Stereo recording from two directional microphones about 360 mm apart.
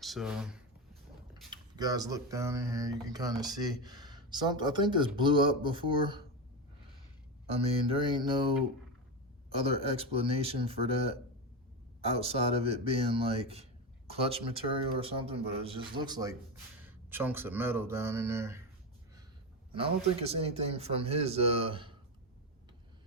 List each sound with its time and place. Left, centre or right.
0.0 s speech: centre
7.4 s speech: centre
9.5 s speech: centre
19.7 s speech: centre